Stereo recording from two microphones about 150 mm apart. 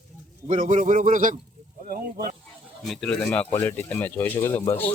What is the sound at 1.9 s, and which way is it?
Speech, 75° right (ahead or behind).